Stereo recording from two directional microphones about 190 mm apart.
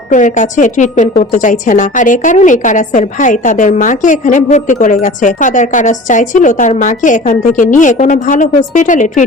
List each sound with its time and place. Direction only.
0.1 s a woman's voice: 40° left (ahead or behind)